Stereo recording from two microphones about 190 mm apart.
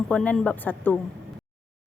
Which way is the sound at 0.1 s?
5° left (ahead or behind).